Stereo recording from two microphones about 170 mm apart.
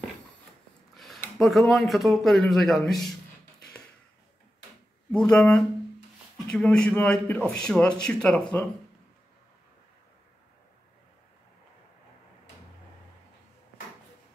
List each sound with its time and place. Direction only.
0.9 s a sound: centre (ahead or behind)
1.4 s a man's voice: centre (ahead or behind)
5.1 s a man's voice: 5° left (ahead or behind)